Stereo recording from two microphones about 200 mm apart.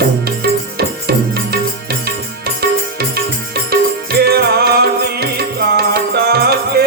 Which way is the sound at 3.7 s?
50° right (ahead or behind).